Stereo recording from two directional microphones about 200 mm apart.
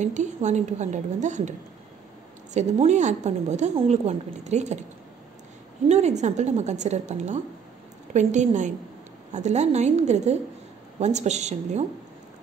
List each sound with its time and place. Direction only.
0.0 s a woman's voice: 35° right (ahead or behind)
2.5 s a woman's voice: 35° right (ahead or behind)
5.9 s a woman's voice: 35° right (ahead or behind)